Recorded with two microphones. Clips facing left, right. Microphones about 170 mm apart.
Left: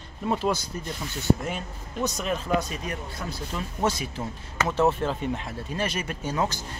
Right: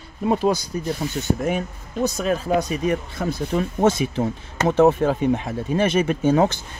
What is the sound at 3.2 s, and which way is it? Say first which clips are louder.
Speech: right 10 dB; 65° right (ahead or behind).